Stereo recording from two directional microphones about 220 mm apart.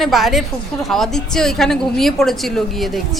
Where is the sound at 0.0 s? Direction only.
Centre (ahead or behind).